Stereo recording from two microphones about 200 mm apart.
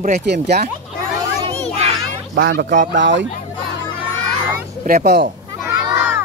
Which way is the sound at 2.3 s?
65° right (ahead or behind).